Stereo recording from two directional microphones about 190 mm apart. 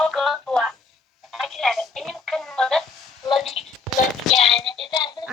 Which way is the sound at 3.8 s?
Centre (ahead or behind).